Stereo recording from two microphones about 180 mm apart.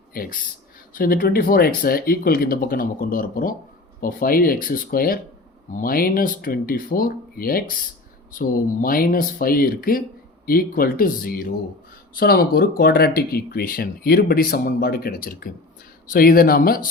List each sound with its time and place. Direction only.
0.1 s speech: 55° left (ahead or behind)